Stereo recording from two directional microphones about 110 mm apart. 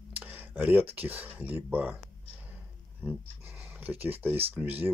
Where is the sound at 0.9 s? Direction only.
15° right (ahead or behind).